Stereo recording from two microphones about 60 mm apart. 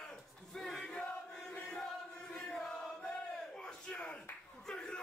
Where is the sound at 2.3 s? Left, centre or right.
Centre.